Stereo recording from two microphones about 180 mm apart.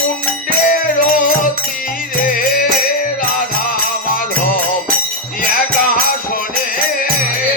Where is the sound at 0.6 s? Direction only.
50° left (ahead or behind).